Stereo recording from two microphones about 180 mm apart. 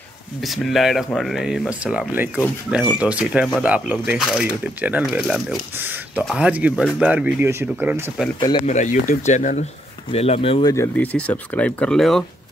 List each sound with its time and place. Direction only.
0.5 s speech: centre (ahead or behind)
8.6 s speech: 45° left (ahead or behind)
10.7 s speech: 10° left (ahead or behind)